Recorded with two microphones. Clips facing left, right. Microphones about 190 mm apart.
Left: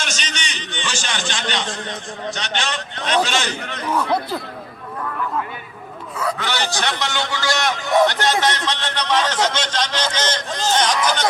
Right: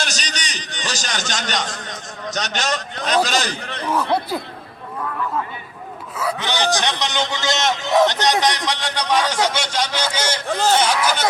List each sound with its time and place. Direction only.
0.0 s a man's voice: 35° right (ahead or behind)
3.9 s speech: 5° right (ahead or behind)
6.4 s a man's voice: 15° right (ahead or behind)